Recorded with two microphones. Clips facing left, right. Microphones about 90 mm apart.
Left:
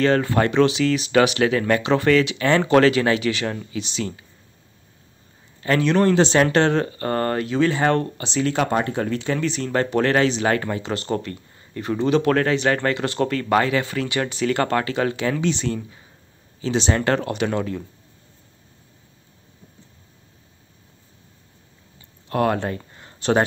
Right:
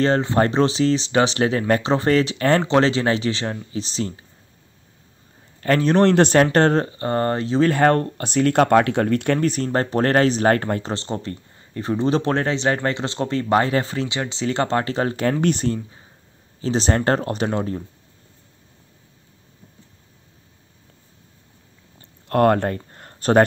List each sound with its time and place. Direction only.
0.0 s speech: 30° right (ahead or behind)
2.6 s speech: 30° right (ahead or behind)
5.6 s speech: 40° right (ahead or behind)
5.9 s speech: 60° right (ahead or behind); by 6.9 s 40° right (ahead or behind)
6.9 s speech: 25° right (ahead or behind)
7.6 s speech: 45° right (ahead or behind)
11.0 s speech: 25° right (ahead or behind)
21.9 s a sound: 50° right (ahead or behind)